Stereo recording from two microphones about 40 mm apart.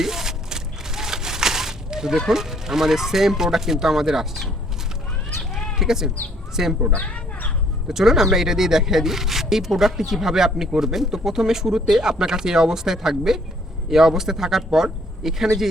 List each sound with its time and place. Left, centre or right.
0.0 s a sound: centre
5.4 s cat: centre
6.6 s speech: centre
6.9 s speech: left
7.9 s speech: centre